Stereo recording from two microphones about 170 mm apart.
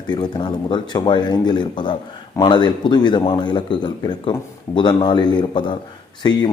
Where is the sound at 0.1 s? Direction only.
25° left (ahead or behind).